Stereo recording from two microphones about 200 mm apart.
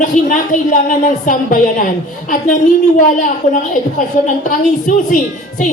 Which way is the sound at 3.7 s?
40° left (ahead or behind).